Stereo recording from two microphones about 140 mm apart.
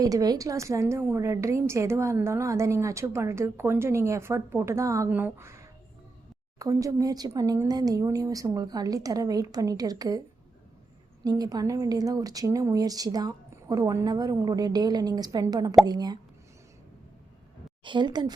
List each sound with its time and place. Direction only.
0.0 s a woman's voice: 25° right (ahead or behind)
17.8 s speech: 35° right (ahead or behind)